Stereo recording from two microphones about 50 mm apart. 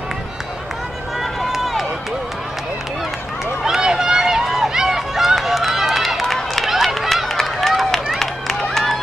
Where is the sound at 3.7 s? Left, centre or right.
Centre.